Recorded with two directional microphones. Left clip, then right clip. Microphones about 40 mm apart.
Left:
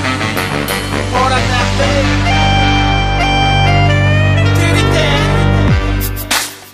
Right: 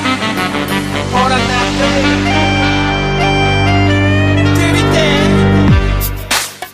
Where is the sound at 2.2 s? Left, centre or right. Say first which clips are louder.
Even; left.